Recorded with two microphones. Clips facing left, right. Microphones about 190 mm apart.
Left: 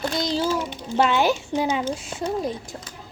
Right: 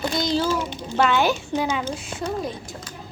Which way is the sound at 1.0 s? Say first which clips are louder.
Even; 30° left (ahead or behind).